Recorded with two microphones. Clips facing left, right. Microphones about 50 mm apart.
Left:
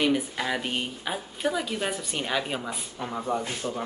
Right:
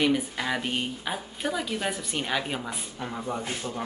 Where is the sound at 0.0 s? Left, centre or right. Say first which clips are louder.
Even; centre.